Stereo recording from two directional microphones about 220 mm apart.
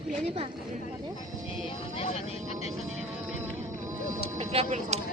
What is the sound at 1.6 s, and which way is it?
Speech, 25° left (ahead or behind).